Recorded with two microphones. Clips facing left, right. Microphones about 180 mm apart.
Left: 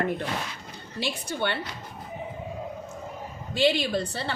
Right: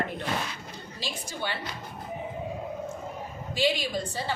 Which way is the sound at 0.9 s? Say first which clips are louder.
Left 7 dB; 65° left (ahead or behind).